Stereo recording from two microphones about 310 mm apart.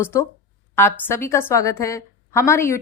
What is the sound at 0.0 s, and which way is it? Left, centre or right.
A woman's voice, centre.